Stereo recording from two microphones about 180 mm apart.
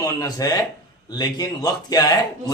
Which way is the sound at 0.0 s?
20° left (ahead or behind).